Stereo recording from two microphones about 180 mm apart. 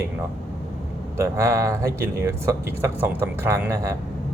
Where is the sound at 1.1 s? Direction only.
15° right (ahead or behind).